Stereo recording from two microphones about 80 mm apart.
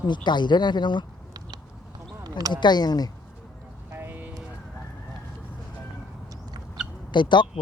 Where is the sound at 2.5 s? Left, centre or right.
Left.